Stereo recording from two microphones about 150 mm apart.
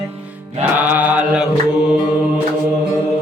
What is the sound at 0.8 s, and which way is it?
Mantra, 10° right (ahead or behind).